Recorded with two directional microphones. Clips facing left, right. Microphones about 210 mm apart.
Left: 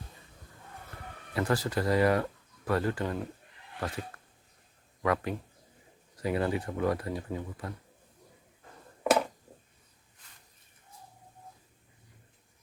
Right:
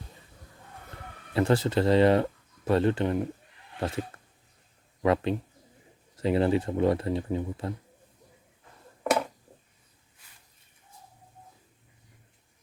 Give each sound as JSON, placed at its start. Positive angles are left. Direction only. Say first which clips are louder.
{"t": 1.3, "sound": "speech", "louder": "right 5 dB", "side_deg": -25}
{"t": 5.0, "sound": "speech", "louder": "right 5 dB", "side_deg": -25}